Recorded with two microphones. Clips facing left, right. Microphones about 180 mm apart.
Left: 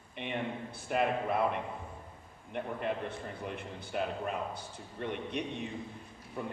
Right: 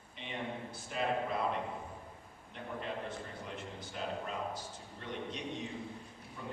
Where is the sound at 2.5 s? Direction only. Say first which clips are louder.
Left 7 dB; 60° left (ahead or behind).